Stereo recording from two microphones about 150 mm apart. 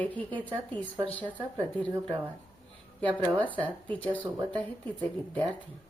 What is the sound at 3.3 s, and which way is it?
Speech, 10° left (ahead or behind).